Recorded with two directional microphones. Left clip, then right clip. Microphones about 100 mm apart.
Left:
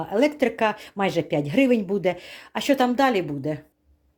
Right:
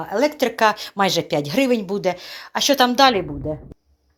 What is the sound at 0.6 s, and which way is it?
Speech, 20° left (ahead or behind).